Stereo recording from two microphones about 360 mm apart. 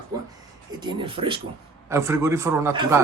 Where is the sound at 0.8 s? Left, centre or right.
Centre.